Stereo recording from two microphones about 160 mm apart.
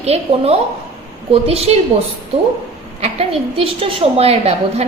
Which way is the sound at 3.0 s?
40° right (ahead or behind).